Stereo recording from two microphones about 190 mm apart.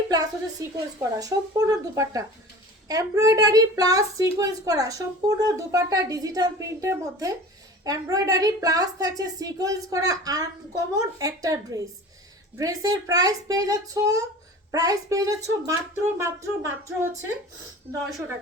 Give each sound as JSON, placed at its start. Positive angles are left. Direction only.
{"t": 0.9, "sound": "a woman's voice", "side_deg": -20}